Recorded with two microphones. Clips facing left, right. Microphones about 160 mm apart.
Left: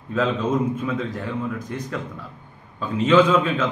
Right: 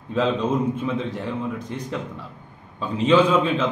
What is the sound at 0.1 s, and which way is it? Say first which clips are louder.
Speech: even; 30° right (ahead or behind).